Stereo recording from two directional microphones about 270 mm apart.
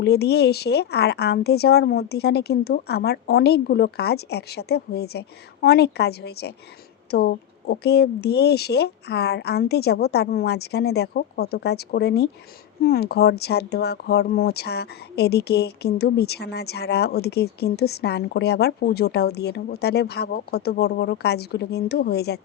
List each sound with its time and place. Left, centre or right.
0.0 s speech: left